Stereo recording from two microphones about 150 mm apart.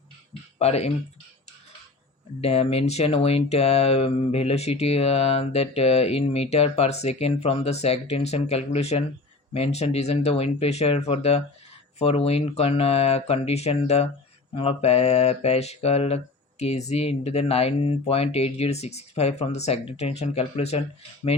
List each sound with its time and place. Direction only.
0.6 s speech: 45° left (ahead or behind)
2.4 s speech: 45° left (ahead or behind)